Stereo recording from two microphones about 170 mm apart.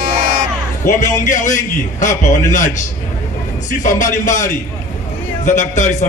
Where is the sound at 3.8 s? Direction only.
50° left (ahead or behind).